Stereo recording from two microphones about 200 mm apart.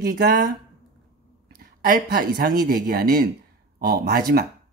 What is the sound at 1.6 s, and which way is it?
Speech, 45° right (ahead or behind).